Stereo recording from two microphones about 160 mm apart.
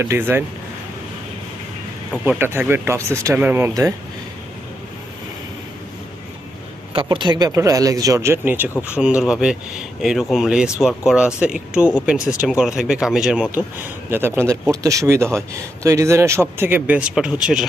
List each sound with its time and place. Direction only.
0.0 s speech: 15° right (ahead or behind)
2.2 s speech: 10° right (ahead or behind)
6.9 s speech: 30° right (ahead or behind); by 17.7 s 5° right (ahead or behind)